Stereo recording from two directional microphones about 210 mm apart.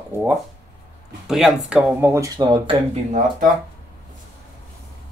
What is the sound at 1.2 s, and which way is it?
Speech, centre (ahead or behind).